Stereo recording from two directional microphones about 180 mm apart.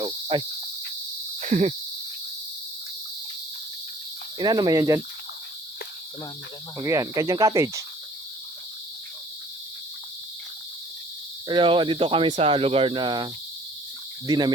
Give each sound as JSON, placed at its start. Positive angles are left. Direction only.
{"t": 0.0, "sound": "insect", "side_deg": -25}
{"t": 1.4, "sound": "cricket", "side_deg": -40}
{"t": 4.4, "sound": "speech", "side_deg": -25}
{"t": 6.7, "sound": "cricket", "side_deg": -15}
{"t": 11.4, "sound": "speech", "side_deg": -25}